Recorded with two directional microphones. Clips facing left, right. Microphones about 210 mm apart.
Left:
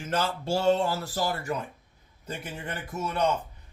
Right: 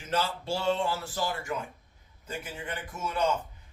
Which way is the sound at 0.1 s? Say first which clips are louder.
Left 2 dB; 45° left (ahead or behind).